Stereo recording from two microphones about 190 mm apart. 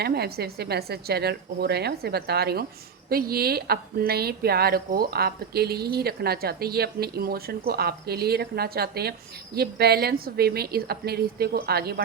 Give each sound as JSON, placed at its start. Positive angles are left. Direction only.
{"t": 0.0, "sound": "a woman's voice", "side_deg": -55}